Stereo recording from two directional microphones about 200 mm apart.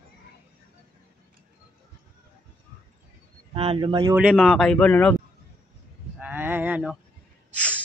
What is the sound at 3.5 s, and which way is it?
Speech, 30° right (ahead or behind).